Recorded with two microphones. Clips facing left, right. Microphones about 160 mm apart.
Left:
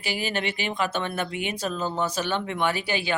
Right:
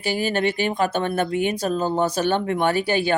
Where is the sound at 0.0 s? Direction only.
45° right (ahead or behind).